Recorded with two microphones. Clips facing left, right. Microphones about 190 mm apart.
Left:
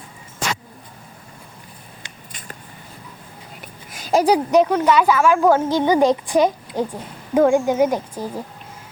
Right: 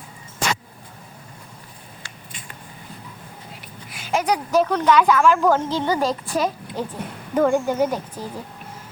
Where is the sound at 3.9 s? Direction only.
40° left (ahead or behind).